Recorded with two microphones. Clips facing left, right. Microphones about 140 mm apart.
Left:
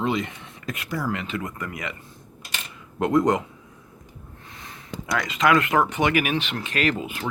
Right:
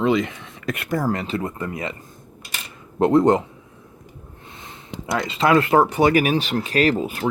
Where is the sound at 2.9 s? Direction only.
30° right (ahead or behind).